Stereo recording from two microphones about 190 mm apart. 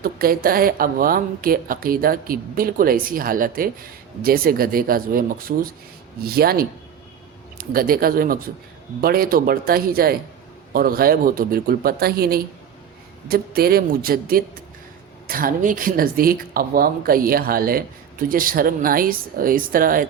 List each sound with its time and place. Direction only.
0.0 s speech: 50° right (ahead or behind)